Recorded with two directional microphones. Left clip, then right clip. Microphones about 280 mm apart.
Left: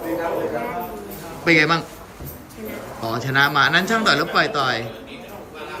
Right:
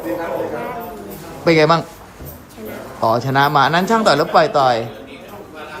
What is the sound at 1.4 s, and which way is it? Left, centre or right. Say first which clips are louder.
Speech: right 4 dB; centre.